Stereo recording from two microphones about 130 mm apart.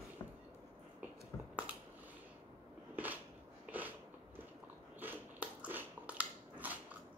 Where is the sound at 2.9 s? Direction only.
15° right (ahead or behind).